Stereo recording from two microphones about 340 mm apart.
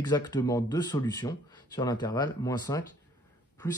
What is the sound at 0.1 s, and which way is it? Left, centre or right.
Speech, centre.